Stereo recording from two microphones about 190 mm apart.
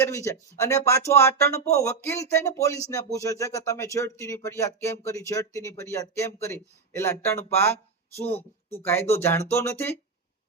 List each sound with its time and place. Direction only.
0.0 s speech: 15° left (ahead or behind)